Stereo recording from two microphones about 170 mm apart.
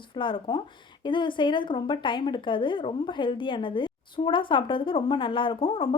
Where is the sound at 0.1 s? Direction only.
30° left (ahead or behind).